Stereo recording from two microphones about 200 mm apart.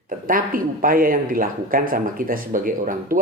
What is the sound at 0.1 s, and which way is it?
Speech, 45° right (ahead or behind).